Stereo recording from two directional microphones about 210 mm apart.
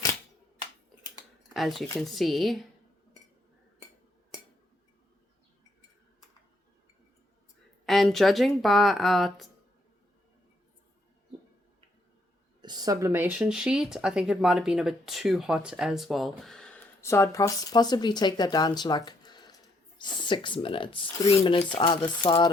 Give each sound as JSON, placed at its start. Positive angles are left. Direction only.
{"t": 1.5, "sound": "speech", "side_deg": 0}
{"t": 7.9, "sound": "speech", "side_deg": 0}
{"t": 12.6, "sound": "speech", "side_deg": -20}